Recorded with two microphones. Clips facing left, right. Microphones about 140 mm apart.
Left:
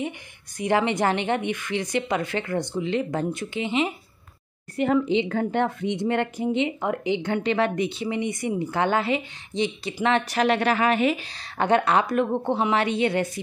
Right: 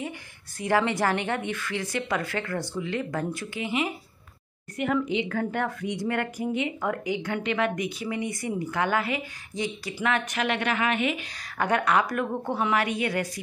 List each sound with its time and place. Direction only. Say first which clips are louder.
0.6 s speech: left 2 dB; 20° left (ahead or behind)